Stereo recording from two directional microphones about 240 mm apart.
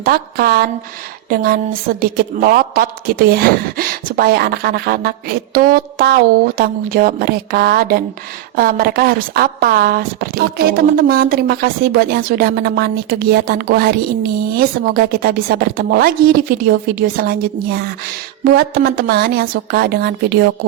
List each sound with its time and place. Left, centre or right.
0.0 s a woman's voice: right